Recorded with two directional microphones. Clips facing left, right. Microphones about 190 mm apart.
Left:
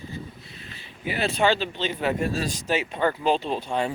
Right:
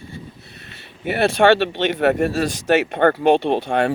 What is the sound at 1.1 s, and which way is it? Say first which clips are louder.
Speech: right 8 dB; 75° right (ahead or behind).